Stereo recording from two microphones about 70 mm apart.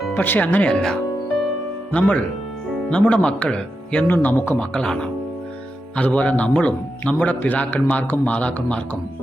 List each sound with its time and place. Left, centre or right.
0.1 s a man's voice: left
0.7 s speech: centre
1.9 s a man's voice: centre
4.0 s a man's voice: left
4.6 s a man's voice: centre